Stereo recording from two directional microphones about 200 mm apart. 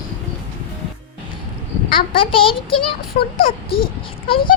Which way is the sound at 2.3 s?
25° left (ahead or behind).